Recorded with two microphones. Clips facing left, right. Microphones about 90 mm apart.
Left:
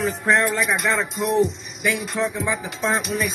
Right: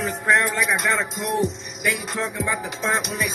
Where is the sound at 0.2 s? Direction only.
Centre (ahead or behind).